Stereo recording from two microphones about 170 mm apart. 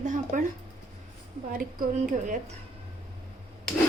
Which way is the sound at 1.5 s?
55° right (ahead or behind).